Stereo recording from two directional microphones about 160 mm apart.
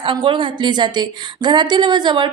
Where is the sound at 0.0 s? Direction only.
30° right (ahead or behind).